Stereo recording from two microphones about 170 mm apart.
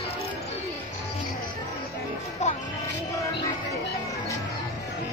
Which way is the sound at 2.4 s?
40° left (ahead or behind).